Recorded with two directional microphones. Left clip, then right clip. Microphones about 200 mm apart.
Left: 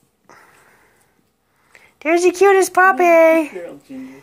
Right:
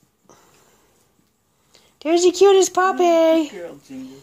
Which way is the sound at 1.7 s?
20° left (ahead or behind).